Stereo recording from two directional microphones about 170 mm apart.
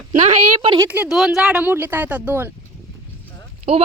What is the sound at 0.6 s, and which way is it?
Speech, 25° right (ahead or behind).